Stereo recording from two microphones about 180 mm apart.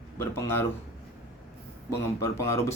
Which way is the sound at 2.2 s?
15° left (ahead or behind).